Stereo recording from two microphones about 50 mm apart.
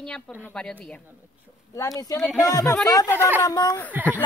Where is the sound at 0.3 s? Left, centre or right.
Left.